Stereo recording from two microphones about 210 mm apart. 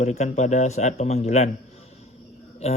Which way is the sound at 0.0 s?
35° left (ahead or behind).